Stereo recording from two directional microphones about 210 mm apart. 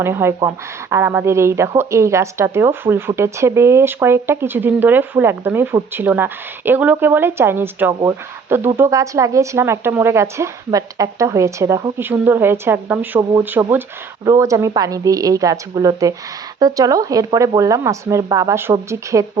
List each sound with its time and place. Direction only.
0.0 s speech: 10° right (ahead or behind)